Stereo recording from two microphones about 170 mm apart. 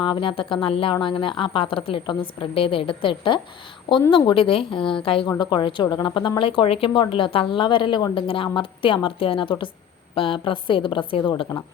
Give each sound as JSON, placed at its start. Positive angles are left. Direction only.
{"t": 0.0, "sound": "a woman's voice", "side_deg": 30}